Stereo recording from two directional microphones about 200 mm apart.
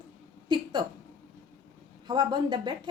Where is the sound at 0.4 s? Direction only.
20° right (ahead or behind).